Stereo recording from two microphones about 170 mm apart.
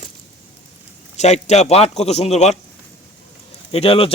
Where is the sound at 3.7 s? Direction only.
35° left (ahead or behind).